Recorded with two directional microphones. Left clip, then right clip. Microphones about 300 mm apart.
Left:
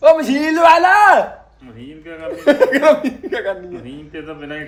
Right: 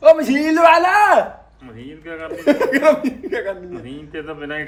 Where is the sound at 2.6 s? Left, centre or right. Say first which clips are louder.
Left 3 dB; centre.